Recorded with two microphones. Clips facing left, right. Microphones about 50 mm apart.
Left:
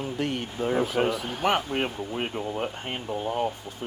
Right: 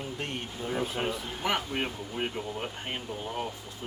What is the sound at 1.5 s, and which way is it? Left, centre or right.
Speech, left.